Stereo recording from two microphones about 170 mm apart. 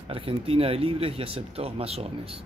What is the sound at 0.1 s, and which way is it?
Speech, 35° right (ahead or behind).